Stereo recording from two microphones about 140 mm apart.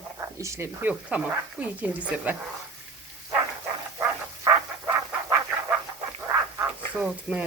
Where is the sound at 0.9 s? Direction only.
10° right (ahead or behind).